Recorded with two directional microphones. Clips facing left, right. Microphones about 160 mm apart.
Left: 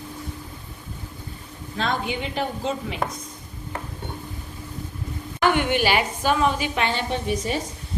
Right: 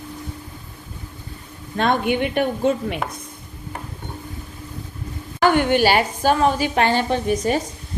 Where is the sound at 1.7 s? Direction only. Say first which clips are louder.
Right 7 dB; 60° right (ahead or behind).